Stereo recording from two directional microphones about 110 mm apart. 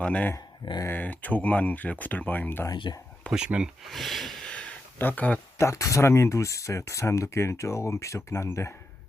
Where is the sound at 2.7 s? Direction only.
40° left (ahead or behind).